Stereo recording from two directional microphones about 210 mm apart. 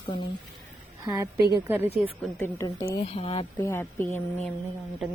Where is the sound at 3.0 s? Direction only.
30° left (ahead or behind).